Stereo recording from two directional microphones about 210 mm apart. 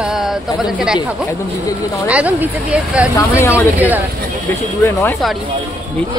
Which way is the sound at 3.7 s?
10° right (ahead or behind).